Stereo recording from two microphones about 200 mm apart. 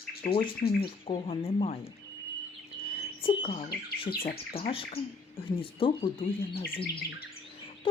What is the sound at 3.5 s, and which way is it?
Speech, 45° left (ahead or behind).